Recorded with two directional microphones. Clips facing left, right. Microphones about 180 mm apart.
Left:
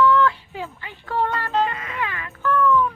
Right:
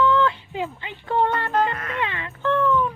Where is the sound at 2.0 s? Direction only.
25° right (ahead or behind).